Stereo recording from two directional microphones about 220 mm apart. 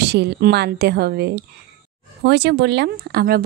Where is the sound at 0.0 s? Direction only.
50° right (ahead or behind).